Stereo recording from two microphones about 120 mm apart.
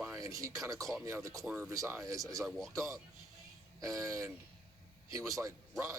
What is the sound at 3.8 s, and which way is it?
A man's voice, 25° right (ahead or behind).